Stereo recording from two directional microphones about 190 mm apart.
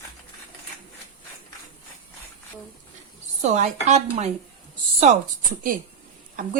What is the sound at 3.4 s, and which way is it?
Speech, 40° right (ahead or behind).